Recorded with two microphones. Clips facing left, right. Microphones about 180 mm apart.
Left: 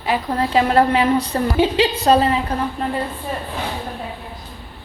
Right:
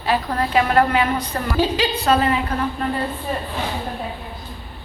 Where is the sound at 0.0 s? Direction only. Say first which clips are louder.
Left 1 dB; 20° left (ahead or behind).